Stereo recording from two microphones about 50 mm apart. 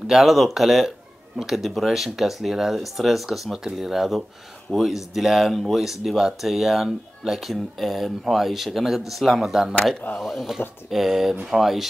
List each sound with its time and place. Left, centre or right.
0.0 s speech: centre